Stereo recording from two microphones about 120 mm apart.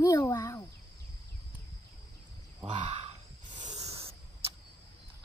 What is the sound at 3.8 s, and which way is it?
Spray, 55° right (ahead or behind).